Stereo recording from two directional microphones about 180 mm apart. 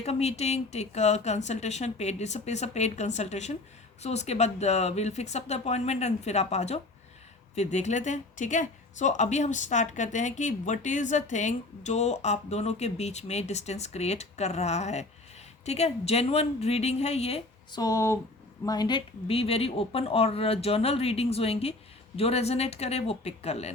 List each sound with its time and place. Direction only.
0.0 s speech: 35° left (ahead or behind)
17.7 s speech: 20° left (ahead or behind); by 23.7 s 35° left (ahead or behind)